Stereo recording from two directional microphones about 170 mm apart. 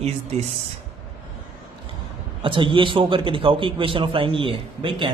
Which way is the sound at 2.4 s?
30° right (ahead or behind).